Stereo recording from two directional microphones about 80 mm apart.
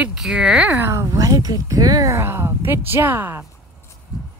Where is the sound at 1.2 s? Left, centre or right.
Right.